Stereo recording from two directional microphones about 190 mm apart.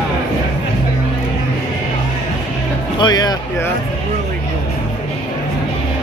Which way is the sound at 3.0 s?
20° left (ahead or behind).